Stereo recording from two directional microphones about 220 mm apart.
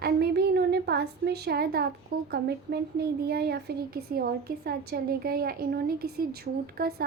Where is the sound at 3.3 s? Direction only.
45° right (ahead or behind).